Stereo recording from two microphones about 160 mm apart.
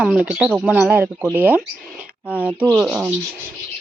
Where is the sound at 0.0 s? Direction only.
5° right (ahead or behind).